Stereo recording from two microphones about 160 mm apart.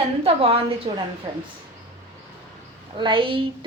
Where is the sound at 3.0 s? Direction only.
30° right (ahead or behind).